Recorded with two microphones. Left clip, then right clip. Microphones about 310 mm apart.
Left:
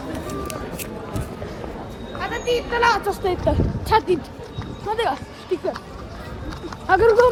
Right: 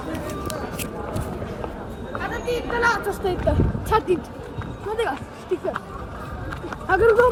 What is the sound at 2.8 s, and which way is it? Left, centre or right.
Speech, left.